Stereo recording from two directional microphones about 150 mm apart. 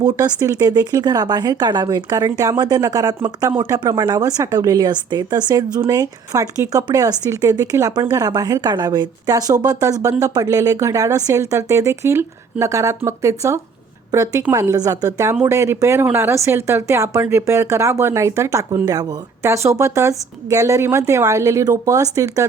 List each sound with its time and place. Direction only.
0.0 s speech: 25° right (ahead or behind)